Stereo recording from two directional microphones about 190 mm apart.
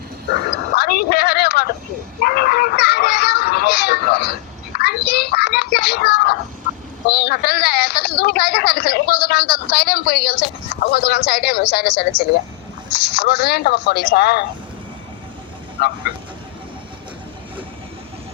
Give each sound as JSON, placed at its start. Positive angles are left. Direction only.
{"t": 0.7, "sound": "a sound", "side_deg": 55}
{"t": 12.9, "sound": "speech", "side_deg": 60}
{"t": 15.8, "sound": "speech", "side_deg": 55}